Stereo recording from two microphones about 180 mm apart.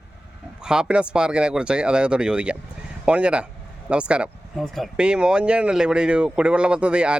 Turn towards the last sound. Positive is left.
turn(degrees=-5)  # may be behind; listen again after turning